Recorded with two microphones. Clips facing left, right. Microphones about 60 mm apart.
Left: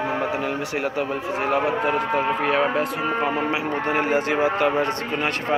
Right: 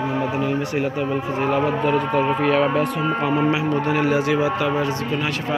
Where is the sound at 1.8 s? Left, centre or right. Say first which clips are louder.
Right 2 dB; left.